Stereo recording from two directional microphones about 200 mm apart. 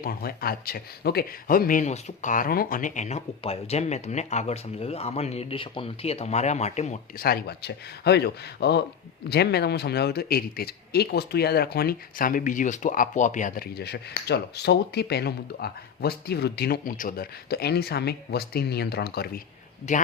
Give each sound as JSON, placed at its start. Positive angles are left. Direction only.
{"t": 0.0, "sound": "speech", "side_deg": 50}
{"t": 7.2, "sound": "a man's voice", "side_deg": 50}
{"t": 19.9, "sound": "speech", "side_deg": 35}